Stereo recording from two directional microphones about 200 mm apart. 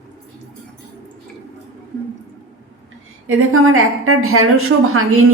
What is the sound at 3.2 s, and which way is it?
A woman's voice, 90° right.